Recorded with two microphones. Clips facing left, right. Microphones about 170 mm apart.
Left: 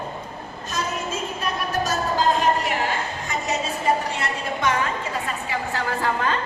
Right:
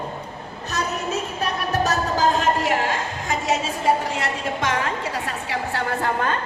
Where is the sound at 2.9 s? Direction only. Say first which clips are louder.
Right 2 dB; 90° right.